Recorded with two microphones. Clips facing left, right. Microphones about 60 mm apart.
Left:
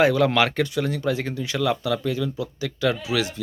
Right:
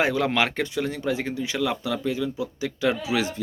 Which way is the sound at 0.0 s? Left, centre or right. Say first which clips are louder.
Left 4 dB; centre.